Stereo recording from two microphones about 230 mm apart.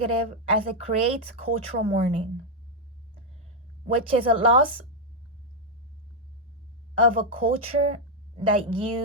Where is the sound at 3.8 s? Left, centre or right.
Right.